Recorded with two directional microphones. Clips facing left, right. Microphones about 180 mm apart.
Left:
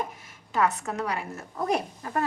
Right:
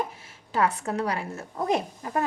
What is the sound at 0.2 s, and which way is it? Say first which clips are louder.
A woman's voice: left 1 dB; 30° right (ahead or behind).